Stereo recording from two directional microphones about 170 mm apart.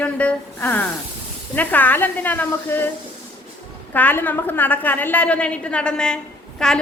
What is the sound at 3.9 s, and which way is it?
A woman's voice, 10° left (ahead or behind).